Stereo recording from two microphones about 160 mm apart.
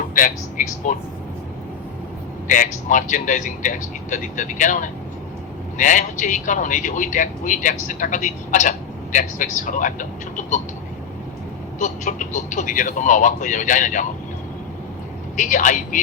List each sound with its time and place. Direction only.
0.1 s speech: 55° left (ahead or behind)
2.5 s a man's voice: 55° left (ahead or behind)
11.8 s a man's voice: 50° left (ahead or behind)
15.4 s a man's voice: 55° left (ahead or behind)